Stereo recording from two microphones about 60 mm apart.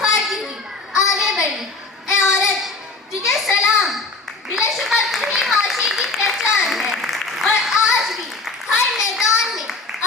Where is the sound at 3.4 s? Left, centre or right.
Centre.